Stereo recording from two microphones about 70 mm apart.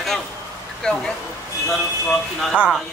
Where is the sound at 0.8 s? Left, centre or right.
Centre.